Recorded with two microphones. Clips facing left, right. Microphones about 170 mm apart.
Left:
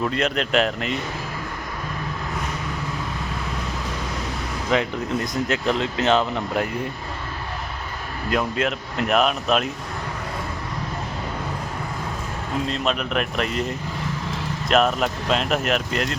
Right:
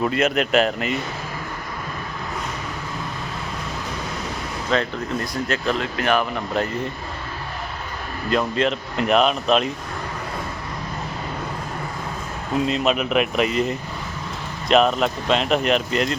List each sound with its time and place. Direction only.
0.0 s speech: 5° right (ahead or behind)
4.7 s speech: 15° left (ahead or behind)
8.3 s speech: 5° left (ahead or behind)
12.6 s speech: 5° right (ahead or behind)